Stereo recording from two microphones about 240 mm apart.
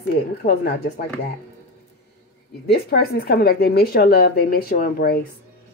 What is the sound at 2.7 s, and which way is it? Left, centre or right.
Speech, left.